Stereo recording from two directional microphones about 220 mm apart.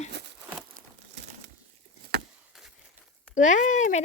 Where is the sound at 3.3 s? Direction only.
35° left (ahead or behind).